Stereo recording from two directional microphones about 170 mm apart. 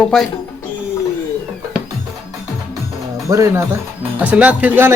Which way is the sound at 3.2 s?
15° right (ahead or behind).